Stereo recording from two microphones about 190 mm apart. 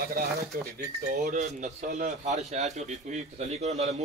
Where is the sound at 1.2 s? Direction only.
40° right (ahead or behind).